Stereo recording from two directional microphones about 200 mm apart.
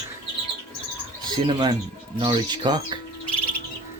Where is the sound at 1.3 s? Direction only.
20° right (ahead or behind).